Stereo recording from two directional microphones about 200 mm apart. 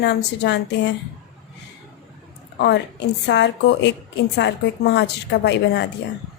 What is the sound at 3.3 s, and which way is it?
A woman's voice, 60° left (ahead or behind).